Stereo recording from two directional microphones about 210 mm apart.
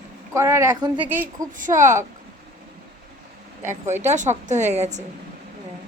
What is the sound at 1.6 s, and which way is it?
Speech, 35° right (ahead or behind).